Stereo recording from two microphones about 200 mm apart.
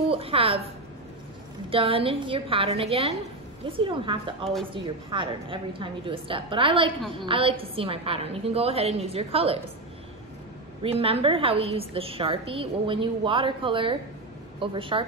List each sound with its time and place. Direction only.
0.1 s a woman's voice: 30° right (ahead or behind)
1.7 s a woman's voice: 25° right (ahead or behind)
10.8 s a woman's voice: 30° right (ahead or behind)